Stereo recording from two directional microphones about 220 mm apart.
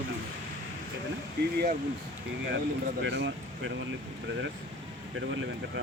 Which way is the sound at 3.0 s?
55° right (ahead or behind).